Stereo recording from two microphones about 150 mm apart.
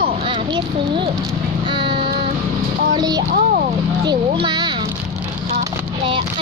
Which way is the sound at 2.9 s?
25° right (ahead or behind).